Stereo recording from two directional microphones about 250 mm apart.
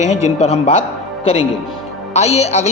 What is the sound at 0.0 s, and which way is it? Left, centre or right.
A man's voice, left.